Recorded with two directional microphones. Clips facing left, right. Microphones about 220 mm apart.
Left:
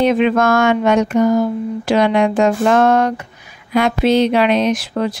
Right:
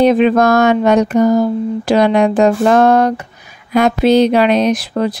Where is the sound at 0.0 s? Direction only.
35° right (ahead or behind).